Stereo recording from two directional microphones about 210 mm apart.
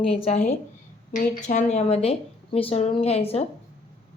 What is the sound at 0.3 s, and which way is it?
Speech, 30° left (ahead or behind).